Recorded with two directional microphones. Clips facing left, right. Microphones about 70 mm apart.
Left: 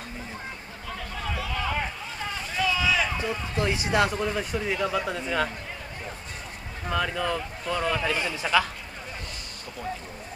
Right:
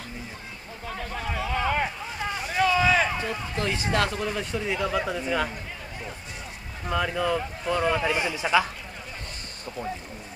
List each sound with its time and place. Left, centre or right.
0.8 s vehicle: right
1.4 s a sound: right
2.4 s boat: right
3.2 s speech: centre
4.2 s speech: centre
6.9 s speech: centre